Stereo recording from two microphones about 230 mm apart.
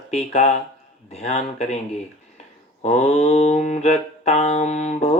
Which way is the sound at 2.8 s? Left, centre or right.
Left.